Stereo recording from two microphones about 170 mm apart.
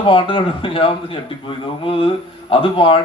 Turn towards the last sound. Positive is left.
turn(degrees=30)  # may be behind; listen again after turning